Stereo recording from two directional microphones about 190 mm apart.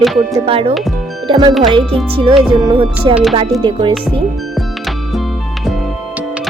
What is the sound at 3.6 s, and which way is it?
Speech, 25° right (ahead or behind).